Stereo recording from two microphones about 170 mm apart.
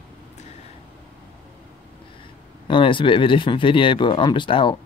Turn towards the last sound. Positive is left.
turn(degrees=30)  # may be behind; listen again after turning